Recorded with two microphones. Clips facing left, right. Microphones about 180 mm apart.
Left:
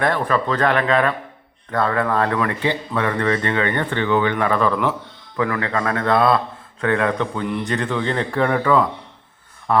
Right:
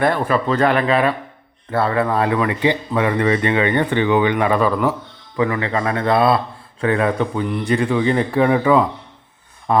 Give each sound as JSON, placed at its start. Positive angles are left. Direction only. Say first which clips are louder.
{"t": 0.0, "sound": "a man's voice", "louder": "right 2 dB", "side_deg": -5}